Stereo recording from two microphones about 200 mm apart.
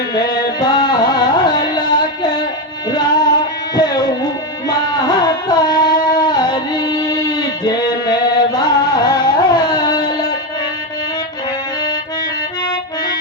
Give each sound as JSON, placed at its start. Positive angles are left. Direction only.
{"t": 0.1, "sound": "music", "side_deg": 20}